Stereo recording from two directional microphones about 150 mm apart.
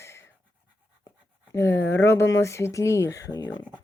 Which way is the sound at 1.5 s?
15° left (ahead or behind).